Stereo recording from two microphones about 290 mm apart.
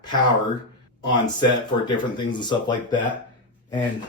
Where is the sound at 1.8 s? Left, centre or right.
Centre.